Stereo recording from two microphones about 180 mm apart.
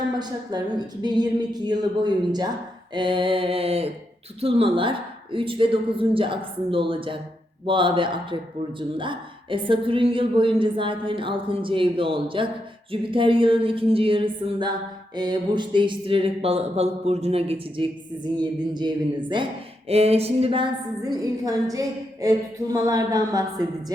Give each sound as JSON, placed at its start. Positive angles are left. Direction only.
{"t": 0.2, "sound": "speech", "side_deg": -25}